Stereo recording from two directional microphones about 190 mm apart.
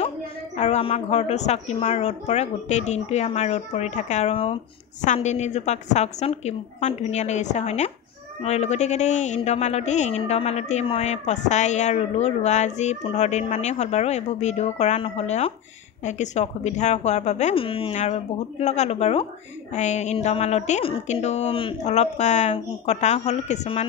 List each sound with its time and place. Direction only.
0.6 s speech: 35° left (ahead or behind)